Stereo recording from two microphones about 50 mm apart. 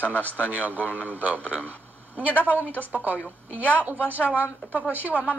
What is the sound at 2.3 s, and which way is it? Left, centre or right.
Speech, left.